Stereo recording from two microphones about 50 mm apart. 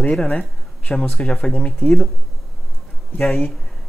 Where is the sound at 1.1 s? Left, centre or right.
Centre.